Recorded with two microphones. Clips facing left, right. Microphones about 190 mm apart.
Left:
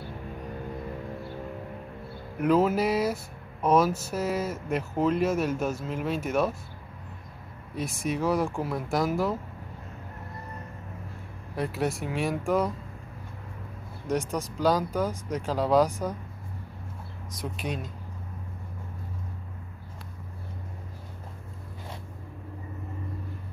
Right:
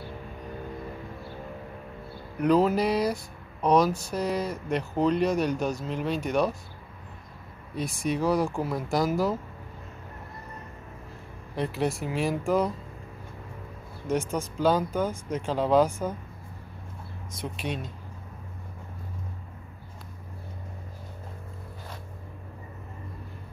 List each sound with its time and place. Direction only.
2.3 s speech: 5° left (ahead or behind)
7.7 s speech: centre (ahead or behind)
11.5 s speech: centre (ahead or behind)
14.1 s speech: 40° left (ahead or behind)
14.6 s speech: centre (ahead or behind)
17.4 s speech: centre (ahead or behind)